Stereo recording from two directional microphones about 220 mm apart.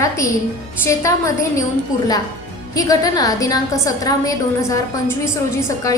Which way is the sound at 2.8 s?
15° left (ahead or behind).